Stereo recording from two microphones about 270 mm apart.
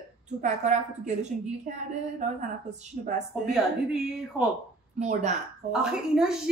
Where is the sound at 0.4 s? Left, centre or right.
Right.